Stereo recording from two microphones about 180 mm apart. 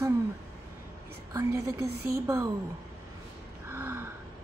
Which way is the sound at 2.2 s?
15° right (ahead or behind).